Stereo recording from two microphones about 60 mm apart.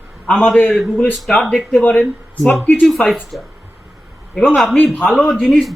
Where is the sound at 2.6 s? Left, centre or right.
Left.